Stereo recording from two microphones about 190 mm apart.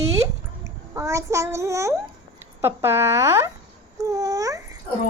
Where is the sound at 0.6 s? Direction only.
15° right (ahead or behind).